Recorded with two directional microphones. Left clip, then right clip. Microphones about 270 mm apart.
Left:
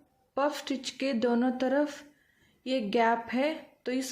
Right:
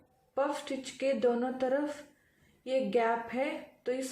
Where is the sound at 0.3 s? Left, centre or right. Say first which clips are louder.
Left 2 dB; left.